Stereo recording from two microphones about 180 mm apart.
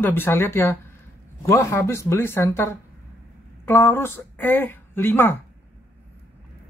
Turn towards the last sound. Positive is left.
turn(degrees=10)  # may be behind; listen again after turning